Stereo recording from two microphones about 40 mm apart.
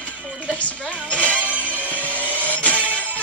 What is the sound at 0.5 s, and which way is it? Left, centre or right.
Music, left.